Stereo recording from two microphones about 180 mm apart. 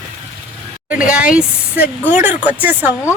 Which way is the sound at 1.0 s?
50° left (ahead or behind).